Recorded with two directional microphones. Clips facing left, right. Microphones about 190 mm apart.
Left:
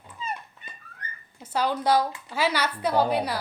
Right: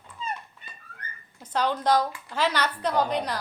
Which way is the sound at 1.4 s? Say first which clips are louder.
Even; 10° left (ahead or behind).